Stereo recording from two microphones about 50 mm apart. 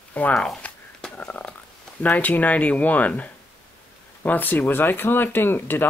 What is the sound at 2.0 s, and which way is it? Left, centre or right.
Speech, left.